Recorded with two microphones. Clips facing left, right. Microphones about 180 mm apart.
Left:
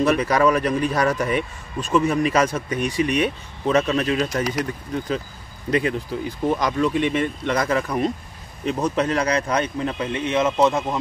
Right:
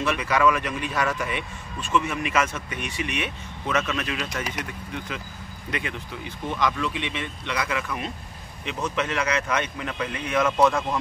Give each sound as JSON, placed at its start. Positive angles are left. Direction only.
{"t": 0.0, "sound": "speech", "side_deg": 40}